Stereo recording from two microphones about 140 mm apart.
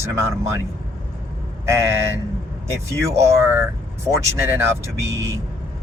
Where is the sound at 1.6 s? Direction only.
20° right (ahead or behind).